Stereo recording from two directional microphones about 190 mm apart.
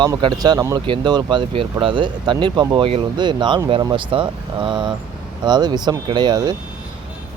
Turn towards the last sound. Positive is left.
turn(degrees=-20)  # may be behind; listen again after turning